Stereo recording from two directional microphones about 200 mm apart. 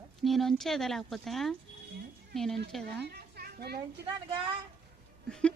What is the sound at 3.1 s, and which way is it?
Children playing, 50° right (ahead or behind).